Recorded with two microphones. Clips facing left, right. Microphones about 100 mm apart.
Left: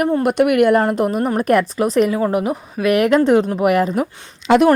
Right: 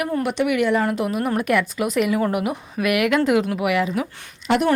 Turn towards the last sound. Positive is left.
turn(degrees=90)